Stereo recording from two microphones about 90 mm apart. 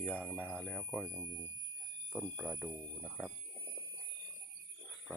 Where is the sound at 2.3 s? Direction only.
15° right (ahead or behind).